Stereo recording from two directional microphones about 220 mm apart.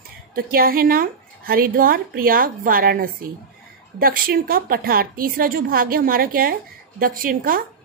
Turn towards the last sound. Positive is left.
turn(degrees=-40)  # may be behind; listen again after turning